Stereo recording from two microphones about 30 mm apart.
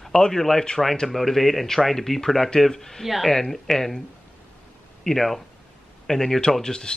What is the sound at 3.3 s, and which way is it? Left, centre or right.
Speech, centre.